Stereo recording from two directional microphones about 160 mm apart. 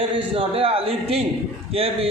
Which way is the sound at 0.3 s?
35° right (ahead or behind).